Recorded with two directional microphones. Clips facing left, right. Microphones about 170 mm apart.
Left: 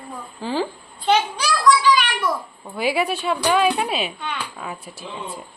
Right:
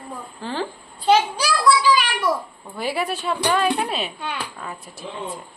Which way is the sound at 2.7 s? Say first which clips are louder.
Left 3 dB; 5° left (ahead or behind).